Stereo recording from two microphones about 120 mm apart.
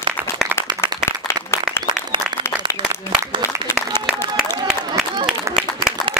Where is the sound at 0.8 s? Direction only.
20° left (ahead or behind).